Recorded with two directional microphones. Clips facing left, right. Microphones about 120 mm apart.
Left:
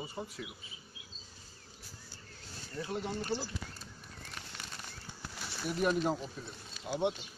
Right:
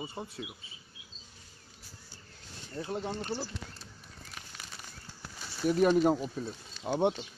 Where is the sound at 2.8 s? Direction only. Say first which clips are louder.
Right 2 dB; 30° right (ahead or behind).